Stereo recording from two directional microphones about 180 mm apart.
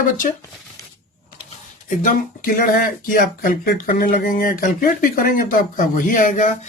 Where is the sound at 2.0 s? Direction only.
50° left (ahead or behind).